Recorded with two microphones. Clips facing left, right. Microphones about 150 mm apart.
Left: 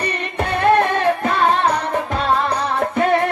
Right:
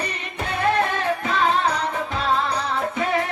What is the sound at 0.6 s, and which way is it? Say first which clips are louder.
Music: left 6 dB; 60° left (ahead or behind).